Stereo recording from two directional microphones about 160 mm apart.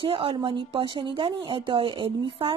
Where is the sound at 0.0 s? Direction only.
35° right (ahead or behind).